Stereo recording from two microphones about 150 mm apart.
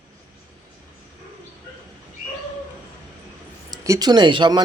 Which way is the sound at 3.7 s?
25° right (ahead or behind).